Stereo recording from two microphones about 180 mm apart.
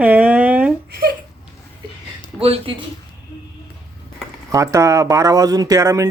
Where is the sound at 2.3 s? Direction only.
30° right (ahead or behind).